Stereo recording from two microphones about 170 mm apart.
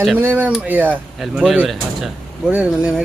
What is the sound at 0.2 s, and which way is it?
Speech, 10° right (ahead or behind).